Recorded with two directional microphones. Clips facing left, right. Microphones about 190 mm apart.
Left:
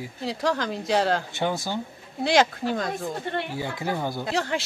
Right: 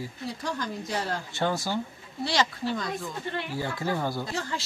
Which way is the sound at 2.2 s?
55° left (ahead or behind).